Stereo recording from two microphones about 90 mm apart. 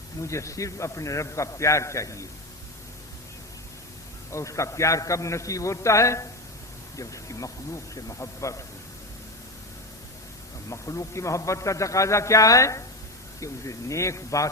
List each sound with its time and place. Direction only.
0.2 s a man's voice: 35° left (ahead or behind)
4.3 s a man's voice: 35° left (ahead or behind)
10.7 s a man's voice: 35° left (ahead or behind)